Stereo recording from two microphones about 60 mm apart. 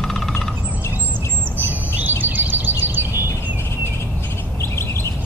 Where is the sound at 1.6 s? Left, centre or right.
Right.